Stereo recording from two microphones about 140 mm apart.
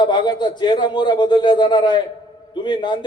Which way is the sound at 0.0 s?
30° left (ahead or behind).